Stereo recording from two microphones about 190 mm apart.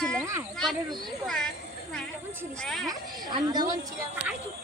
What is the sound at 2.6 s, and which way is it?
Speech, centre (ahead or behind).